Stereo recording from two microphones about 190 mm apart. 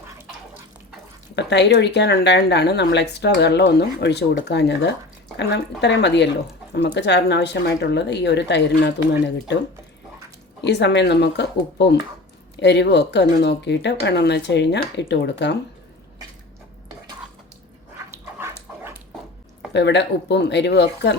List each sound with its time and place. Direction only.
1.4 s speech: 65° left (ahead or behind)
10.6 s speech: 65° left (ahead or behind)
18.1 s dog: 15° right (ahead or behind)
19.7 s speech: 65° left (ahead or behind)